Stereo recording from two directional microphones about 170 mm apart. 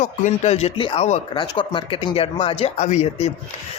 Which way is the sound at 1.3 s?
25° left (ahead or behind).